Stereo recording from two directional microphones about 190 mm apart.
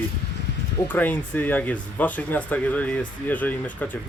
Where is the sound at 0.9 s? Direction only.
10° left (ahead or behind).